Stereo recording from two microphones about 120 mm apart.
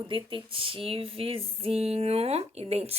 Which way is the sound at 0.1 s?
45° right (ahead or behind).